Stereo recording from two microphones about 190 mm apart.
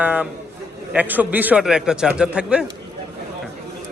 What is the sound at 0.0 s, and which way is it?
A man's voice, 5° right (ahead or behind).